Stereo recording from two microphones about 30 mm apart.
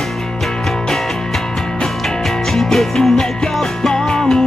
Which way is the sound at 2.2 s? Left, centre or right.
Centre.